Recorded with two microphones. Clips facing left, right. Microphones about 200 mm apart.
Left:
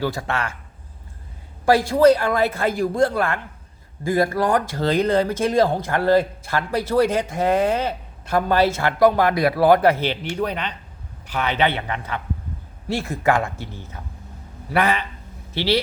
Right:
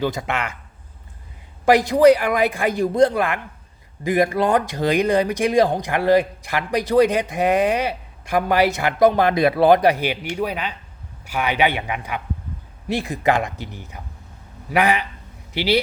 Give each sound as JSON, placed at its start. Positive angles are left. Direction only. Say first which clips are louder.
{"t": 0.0, "sound": "speech", "louder": "right 1 dB", "side_deg": -20}
{"t": 1.6, "sound": "speech", "louder": "right 2 dB", "side_deg": -20}